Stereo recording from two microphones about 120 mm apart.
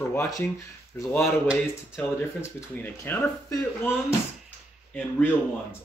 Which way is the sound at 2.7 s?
15° left (ahead or behind).